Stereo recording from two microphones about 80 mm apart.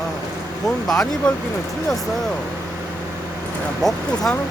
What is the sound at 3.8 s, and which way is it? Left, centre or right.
Speech, centre.